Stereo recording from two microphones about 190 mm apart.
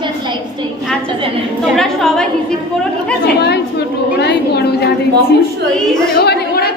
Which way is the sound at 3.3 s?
60° left (ahead or behind).